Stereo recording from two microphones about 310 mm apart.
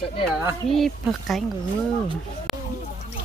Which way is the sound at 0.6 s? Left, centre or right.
Centre.